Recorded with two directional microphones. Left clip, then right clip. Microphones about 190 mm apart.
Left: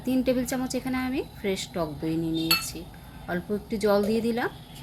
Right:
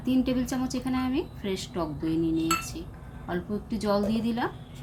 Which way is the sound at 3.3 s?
25° left (ahead or behind).